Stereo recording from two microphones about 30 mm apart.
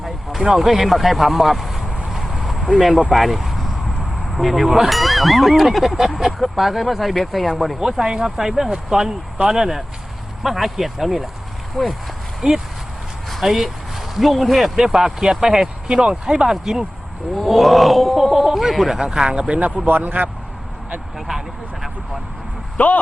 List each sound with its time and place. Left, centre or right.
0.4 s speech: centre
2.1 s a sound: centre
3.1 s speech: centre
7.8 s speech: centre
11.8 s speech: left
12.4 s speech: centre
15.9 s speech: right
17.3 s speech: centre
18.9 s speech: right
19.5 s a man's voice: right
19.9 s a man's voice: right
21.2 s speech: centre
22.8 s speech: left